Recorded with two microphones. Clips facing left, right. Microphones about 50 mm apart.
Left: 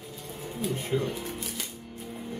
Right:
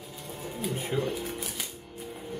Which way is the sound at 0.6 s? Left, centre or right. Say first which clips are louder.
Left 1 dB; centre.